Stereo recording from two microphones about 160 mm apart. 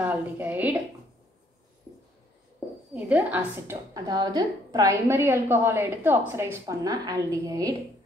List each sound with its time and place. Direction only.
0.0 s a woman's voice: 10° right (ahead or behind)
2.9 s a woman's voice: 10° right (ahead or behind)
3.9 s a woman's voice: 25° right (ahead or behind)